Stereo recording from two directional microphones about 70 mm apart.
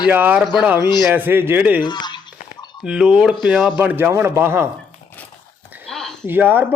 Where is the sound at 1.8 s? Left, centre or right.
Left.